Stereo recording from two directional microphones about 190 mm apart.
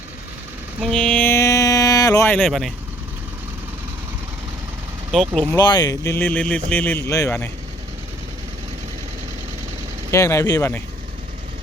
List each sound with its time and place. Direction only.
0.8 s a sound: 5° left (ahead or behind)
2.3 s speech: centre (ahead or behind)
5.3 s speech: 5° left (ahead or behind)
5.5 s speech: 20° left (ahead or behind)
10.1 s speech: 15° left (ahead or behind)